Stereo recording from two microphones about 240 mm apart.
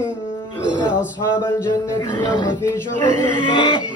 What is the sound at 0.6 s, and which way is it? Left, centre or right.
Music, centre.